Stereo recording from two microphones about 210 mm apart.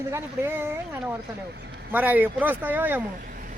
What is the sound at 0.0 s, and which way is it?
Speech, 10° right (ahead or behind).